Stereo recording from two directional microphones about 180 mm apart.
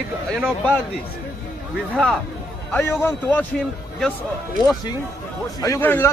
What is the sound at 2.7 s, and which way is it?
Speech, 10° left (ahead or behind).